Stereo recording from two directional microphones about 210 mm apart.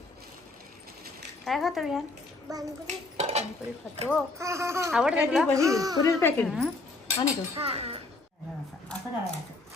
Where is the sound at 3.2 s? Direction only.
30° right (ahead or behind).